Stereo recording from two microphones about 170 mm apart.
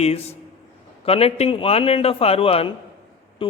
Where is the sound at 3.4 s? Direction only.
30° left (ahead or behind).